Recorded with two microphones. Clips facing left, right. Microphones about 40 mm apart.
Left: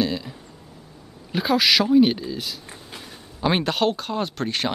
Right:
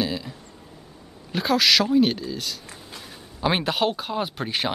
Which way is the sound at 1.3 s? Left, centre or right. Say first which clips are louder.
Left 1 dB; centre.